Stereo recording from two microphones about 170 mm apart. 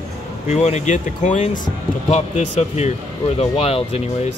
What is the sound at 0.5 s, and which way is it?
Speech, 40° left (ahead or behind).